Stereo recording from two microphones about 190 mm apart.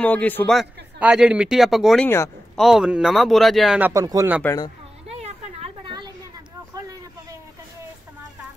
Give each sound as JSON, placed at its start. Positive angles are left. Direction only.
{"t": 0.0, "sound": "a man's voice", "side_deg": 10}
{"t": 0.6, "sound": "a man's voice", "side_deg": -5}
{"t": 2.0, "sound": "a man's voice", "side_deg": 15}
{"t": 2.5, "sound": "a man's voice", "side_deg": 0}
{"t": 3.9, "sound": "speech", "side_deg": -20}
{"t": 4.4, "sound": "a man's voice", "side_deg": 15}
{"t": 5.2, "sound": "a sound", "side_deg": -30}